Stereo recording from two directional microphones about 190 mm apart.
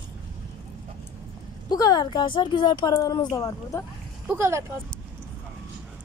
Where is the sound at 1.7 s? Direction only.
20° left (ahead or behind).